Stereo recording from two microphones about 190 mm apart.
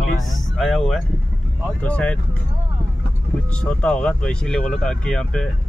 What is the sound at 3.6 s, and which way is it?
Speech, 5° left (ahead or behind).